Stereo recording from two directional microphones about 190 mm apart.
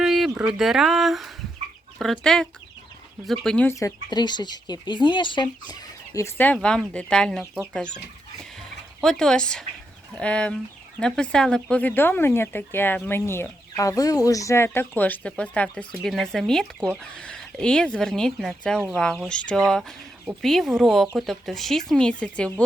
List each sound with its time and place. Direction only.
0.0 s speech: centre (ahead or behind); by 5.7 s 25° left (ahead or behind)
6.1 s speech: 15° left (ahead or behind)